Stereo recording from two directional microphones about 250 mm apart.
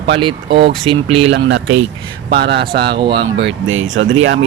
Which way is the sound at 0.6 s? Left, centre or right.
Right.